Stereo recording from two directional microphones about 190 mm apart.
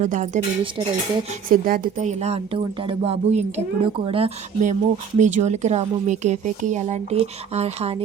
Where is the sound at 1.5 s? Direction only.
50° right (ahead or behind).